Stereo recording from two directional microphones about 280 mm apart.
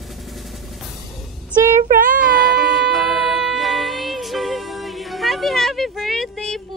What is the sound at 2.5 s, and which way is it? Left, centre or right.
Music, centre.